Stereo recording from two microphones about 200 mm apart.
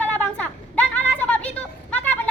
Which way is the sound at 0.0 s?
5° left (ahead or behind).